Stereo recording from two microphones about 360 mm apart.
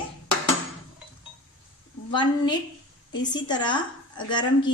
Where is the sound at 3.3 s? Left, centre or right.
Centre.